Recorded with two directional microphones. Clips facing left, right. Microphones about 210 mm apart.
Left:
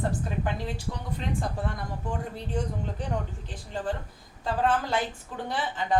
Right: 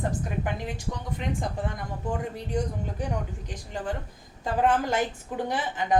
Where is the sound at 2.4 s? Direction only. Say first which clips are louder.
Right 2 dB; 15° right (ahead or behind).